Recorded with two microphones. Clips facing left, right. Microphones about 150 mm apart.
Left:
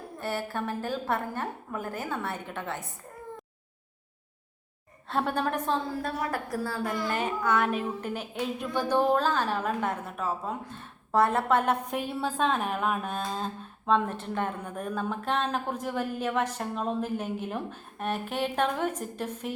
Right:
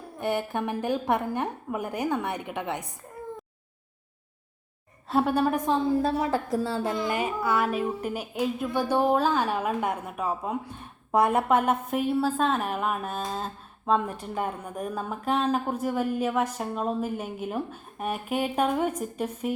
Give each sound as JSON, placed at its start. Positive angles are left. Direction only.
{"t": 0.2, "sound": "a woman's voice", "side_deg": -15}
{"t": 5.0, "sound": "a woman's voice", "side_deg": -10}
{"t": 6.0, "sound": "a woman's voice", "side_deg": -25}
{"t": 7.1, "sound": "a woman's voice", "side_deg": -10}